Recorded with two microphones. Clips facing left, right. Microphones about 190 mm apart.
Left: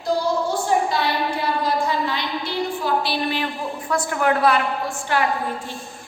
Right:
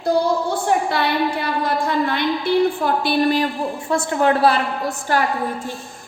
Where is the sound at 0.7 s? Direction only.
65° right (ahead or behind); by 3.5 s 45° right (ahead or behind).